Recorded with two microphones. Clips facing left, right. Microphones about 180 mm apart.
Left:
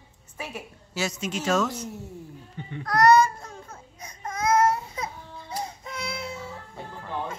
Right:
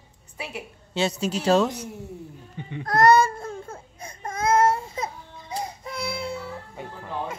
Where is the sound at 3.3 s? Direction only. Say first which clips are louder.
Right 8 dB; 50° right (ahead or behind).